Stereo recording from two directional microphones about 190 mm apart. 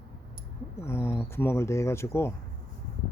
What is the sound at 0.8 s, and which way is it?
Speech, 15° left (ahead or behind).